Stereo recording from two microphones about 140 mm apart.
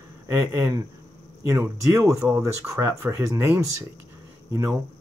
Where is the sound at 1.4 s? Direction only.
20° right (ahead or behind).